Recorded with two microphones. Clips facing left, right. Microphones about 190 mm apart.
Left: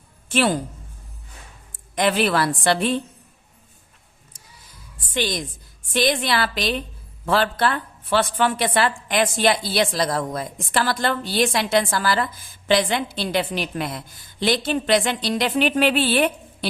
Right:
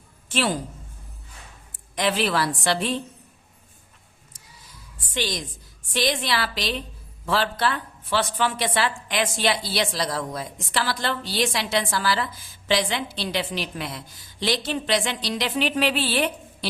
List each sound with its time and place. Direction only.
0.3 s a woman's voice: 60° left (ahead or behind)
1.7 s a woman's voice: 55° left (ahead or behind)
5.1 s a woman's voice: 55° left (ahead or behind)